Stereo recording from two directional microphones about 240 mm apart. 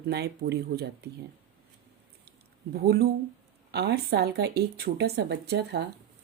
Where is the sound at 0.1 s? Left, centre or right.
Right.